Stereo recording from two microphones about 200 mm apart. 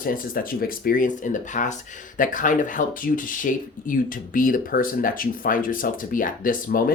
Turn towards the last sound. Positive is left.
turn(degrees=45)  # may be behind; listen again after turning